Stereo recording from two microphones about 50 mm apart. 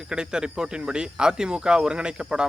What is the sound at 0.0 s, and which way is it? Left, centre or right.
Speech, centre.